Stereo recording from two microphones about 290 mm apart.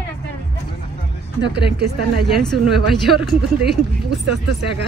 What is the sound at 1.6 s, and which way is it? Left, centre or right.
Speech, right.